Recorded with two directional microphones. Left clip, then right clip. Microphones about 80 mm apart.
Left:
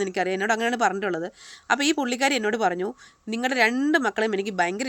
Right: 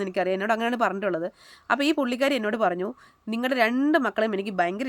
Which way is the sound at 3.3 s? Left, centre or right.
Right.